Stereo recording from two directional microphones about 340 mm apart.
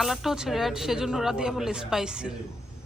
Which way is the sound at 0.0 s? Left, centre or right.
Centre.